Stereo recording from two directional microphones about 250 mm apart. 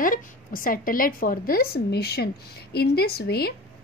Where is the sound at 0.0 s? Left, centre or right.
Left.